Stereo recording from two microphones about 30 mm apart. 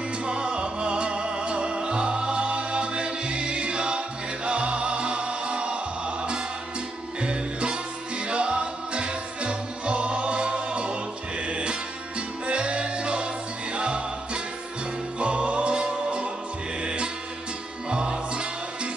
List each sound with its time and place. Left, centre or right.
0.2 s music: right